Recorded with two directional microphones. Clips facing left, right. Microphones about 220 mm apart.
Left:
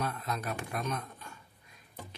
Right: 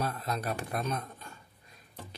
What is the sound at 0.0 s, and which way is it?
Speech, 35° right (ahead or behind).